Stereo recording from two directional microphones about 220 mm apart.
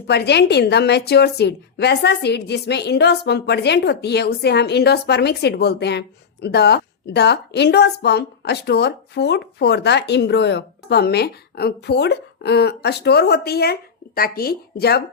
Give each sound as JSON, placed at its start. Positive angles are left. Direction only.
{"t": 0.1, "sound": "a woman's voice", "side_deg": 50}